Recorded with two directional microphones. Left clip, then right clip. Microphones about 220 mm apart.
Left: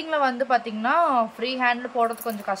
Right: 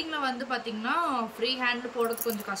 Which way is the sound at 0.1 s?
20° left (ahead or behind).